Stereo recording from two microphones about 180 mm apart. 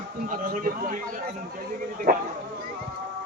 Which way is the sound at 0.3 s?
50° right (ahead or behind).